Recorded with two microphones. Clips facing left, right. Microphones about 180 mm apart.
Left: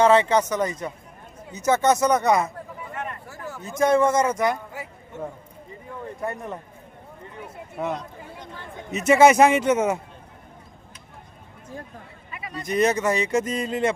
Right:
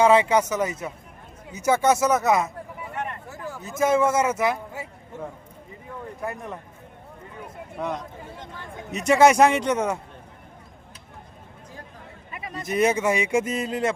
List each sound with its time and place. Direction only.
0.0 s speech: 10° right (ahead or behind)
3.2 s a sound: 15° right (ahead or behind)
3.6 s a man's voice: 5° right (ahead or behind)
6.2 s a man's voice: centre (ahead or behind)
7.8 s a man's voice: 5° left (ahead or behind)
12.3 s a sound: 45° right (ahead or behind)
12.6 s speech: 10° right (ahead or behind)